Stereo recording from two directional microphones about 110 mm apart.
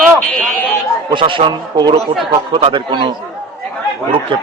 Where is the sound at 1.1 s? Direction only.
50° right (ahead or behind).